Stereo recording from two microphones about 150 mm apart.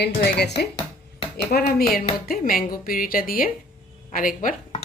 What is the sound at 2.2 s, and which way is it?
A woman's voice, 75° left (ahead or behind).